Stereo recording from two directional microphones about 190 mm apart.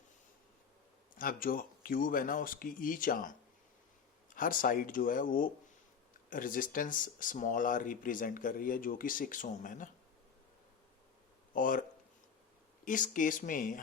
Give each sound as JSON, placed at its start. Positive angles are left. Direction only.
{"t": 1.1, "sound": "speech", "side_deg": 45}
{"t": 11.5, "sound": "speech", "side_deg": 45}